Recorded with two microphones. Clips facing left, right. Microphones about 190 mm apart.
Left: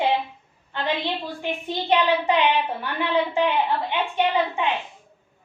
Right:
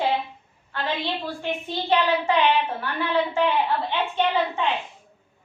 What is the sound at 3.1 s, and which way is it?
A woman's voice, 15° left (ahead or behind).